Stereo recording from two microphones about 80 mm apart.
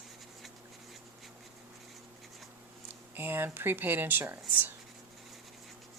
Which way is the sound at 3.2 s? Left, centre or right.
Right.